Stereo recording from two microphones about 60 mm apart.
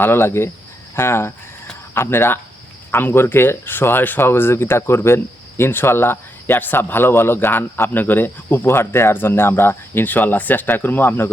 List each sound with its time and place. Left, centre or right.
0.0 s speech: left